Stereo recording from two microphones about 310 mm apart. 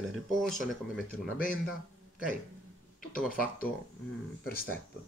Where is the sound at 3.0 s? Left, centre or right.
Left.